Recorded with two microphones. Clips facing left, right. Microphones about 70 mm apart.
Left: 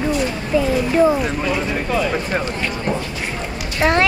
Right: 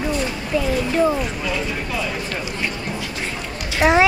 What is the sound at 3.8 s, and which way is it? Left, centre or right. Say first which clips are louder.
Speech: right 1 dB; centre.